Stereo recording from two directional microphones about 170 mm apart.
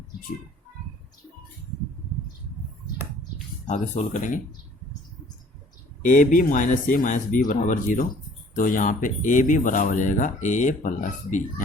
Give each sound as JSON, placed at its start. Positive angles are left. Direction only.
{"t": 3.7, "sound": "speech", "side_deg": 45}
{"t": 6.0, "sound": "speech", "side_deg": 50}